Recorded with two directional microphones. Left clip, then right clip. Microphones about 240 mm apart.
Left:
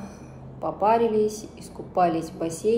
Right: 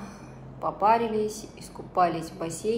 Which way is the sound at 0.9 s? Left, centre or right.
Right.